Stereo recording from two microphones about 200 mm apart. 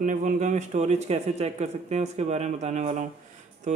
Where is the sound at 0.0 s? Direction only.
40° right (ahead or behind).